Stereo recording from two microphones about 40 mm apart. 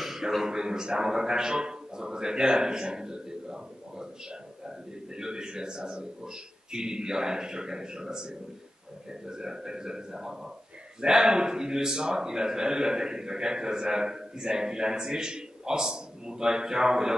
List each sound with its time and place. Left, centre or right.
0.0 s a man's voice: centre